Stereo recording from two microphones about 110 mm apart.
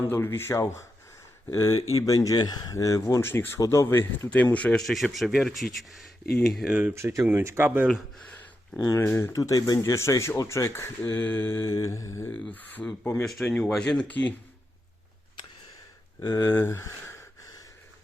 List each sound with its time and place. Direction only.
0.0 s speech: 25° left (ahead or behind)
4.4 s speech: 10° left (ahead or behind)
6.7 s speech: 10° right (ahead or behind)
6.9 s speech: 30° right (ahead or behind)
8.7 s speech: 30° left (ahead or behind)
9.0 s speech: 20° left (ahead or behind)
9.3 s speech: 35° left (ahead or behind)
12.3 s speech: 15° left (ahead or behind)
13.2 s speech: 5° left (ahead or behind)
16.2 s speech: 30° left (ahead or behind)
16.5 s a sound: 20° left (ahead or behind)